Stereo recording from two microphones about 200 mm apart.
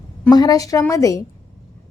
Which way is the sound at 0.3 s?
20° left (ahead or behind).